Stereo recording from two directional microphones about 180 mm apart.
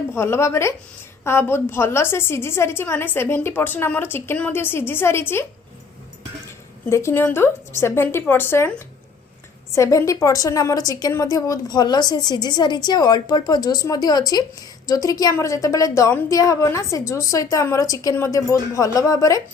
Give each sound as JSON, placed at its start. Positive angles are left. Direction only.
{"t": 0.1, "sound": "a woman's voice", "side_deg": 15}
{"t": 6.9, "sound": "a woman's voice", "side_deg": 15}
{"t": 9.7, "sound": "a woman's voice", "side_deg": 15}